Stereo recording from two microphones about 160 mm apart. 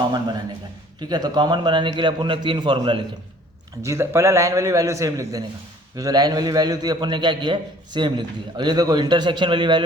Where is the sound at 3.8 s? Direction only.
15° right (ahead or behind).